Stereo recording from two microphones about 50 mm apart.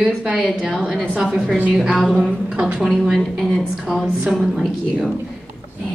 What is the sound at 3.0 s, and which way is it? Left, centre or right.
A woman's voice, centre.